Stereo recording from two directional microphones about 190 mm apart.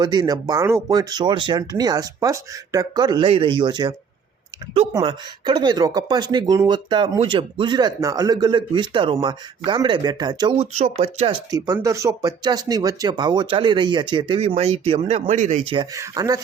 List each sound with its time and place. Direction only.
0.0 s speech: 20° right (ahead or behind)
11.5 s speech: 20° right (ahead or behind)